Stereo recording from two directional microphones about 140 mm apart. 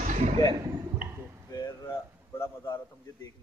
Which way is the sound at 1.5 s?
25° left (ahead or behind).